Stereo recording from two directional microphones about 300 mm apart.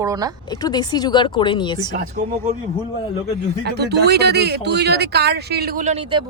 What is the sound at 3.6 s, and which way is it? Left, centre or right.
Speech, right.